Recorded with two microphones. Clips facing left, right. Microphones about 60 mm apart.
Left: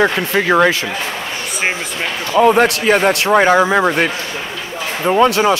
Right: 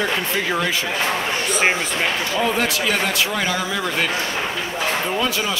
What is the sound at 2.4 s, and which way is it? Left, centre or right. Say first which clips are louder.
Speech: left 11 dB; left.